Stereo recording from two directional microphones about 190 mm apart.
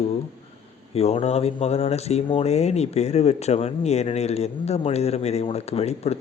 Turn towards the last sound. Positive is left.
turn(degrees=35)  # may be behind; listen again after turning